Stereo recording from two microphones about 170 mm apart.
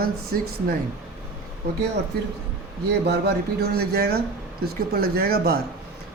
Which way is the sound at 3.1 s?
70° right (ahead or behind).